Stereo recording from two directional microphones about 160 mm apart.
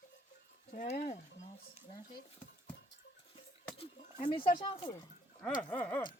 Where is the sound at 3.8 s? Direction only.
30° left (ahead or behind).